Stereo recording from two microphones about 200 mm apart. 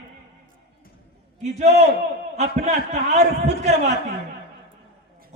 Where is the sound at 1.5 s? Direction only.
30° right (ahead or behind).